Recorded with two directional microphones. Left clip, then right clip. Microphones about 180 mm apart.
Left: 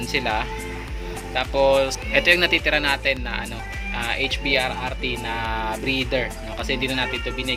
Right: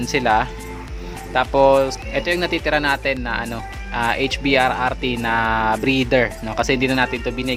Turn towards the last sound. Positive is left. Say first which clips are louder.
# right 4 dB
turn(degrees=-50)  # may be behind; listen again after turning